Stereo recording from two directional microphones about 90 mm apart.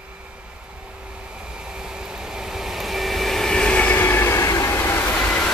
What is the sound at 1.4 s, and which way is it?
Vehicle, 10° right (ahead or behind).